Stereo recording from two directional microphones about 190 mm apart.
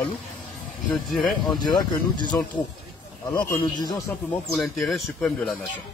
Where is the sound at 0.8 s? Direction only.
Centre (ahead or behind).